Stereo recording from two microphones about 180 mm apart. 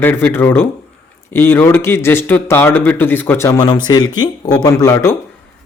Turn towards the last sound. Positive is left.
turn(degrees=15)  # may be behind; listen again after turning